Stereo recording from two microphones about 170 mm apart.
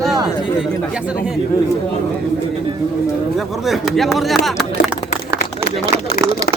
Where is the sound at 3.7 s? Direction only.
Centre (ahead or behind).